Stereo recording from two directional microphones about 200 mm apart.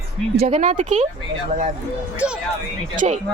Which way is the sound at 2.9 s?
35° right (ahead or behind).